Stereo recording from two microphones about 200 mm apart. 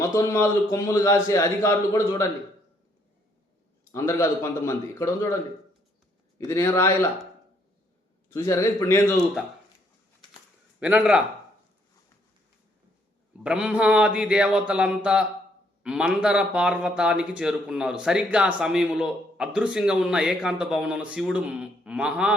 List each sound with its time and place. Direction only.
0.0 s a man's voice: 15° left (ahead or behind)
3.9 s a man's voice: 15° left (ahead or behind)
6.5 s a man's voice: 10° left (ahead or behind)
8.3 s a man's voice: 15° left (ahead or behind)
10.8 s a man's voice: 5° right (ahead or behind)
13.4 s speech: 5° right (ahead or behind)